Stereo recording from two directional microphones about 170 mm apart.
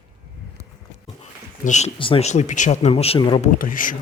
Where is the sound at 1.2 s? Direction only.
45° left (ahead or behind).